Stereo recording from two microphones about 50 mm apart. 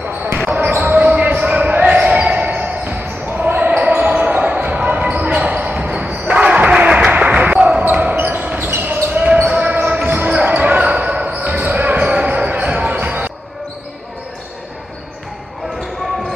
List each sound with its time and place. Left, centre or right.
0.8 s basketball bounce: right
7.5 s basketball bounce: centre
7.9 s basketball bounce: right
8.6 s basketball bounce: right